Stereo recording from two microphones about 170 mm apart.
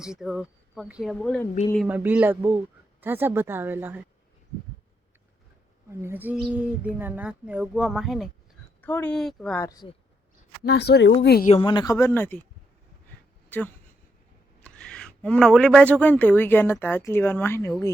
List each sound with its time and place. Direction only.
0.0 s speech: 5° right (ahead or behind)
1.9 s speech: 10° right (ahead or behind)
5.9 s speech: 15° right (ahead or behind)
8.8 s speech: 10° left (ahead or behind)
9.6 s speech: 20° left (ahead or behind)
10.6 s speech: 75° left (ahead or behind)
11.2 s speech: 70° left (ahead or behind)
11.5 s speech: 25° left (ahead or behind)
13.5 s speech: 10° left (ahead or behind)